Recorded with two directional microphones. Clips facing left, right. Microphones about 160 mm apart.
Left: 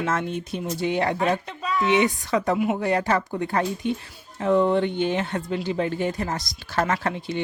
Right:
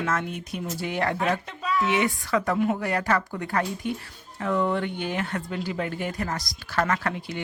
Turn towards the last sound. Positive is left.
turn(degrees=25)  # may be behind; listen again after turning